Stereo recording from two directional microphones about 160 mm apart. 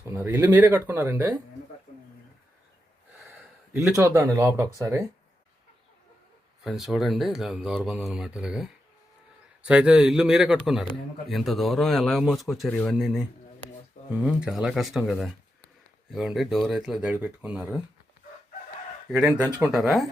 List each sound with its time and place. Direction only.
0.1 s speech: 15° right (ahead or behind)
3.2 s a sound: 10° right (ahead or behind)
4.1 s speech: 15° right (ahead or behind)
6.7 s speech: centre (ahead or behind)
19.1 s speech: 5° right (ahead or behind)